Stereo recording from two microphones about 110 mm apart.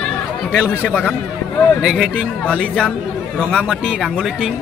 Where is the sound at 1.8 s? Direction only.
Centre (ahead or behind).